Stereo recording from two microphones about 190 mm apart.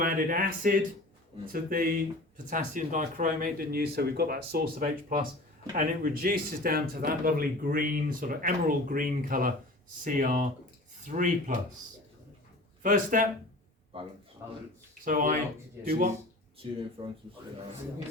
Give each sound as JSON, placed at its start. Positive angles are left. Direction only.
{"t": 0.0, "sound": "speech", "side_deg": -45}
{"t": 12.8, "sound": "speech", "side_deg": -45}
{"t": 14.4, "sound": "a man's voice", "side_deg": -15}
{"t": 15.0, "sound": "speech", "side_deg": -45}
{"t": 17.0, "sound": "speech", "side_deg": -25}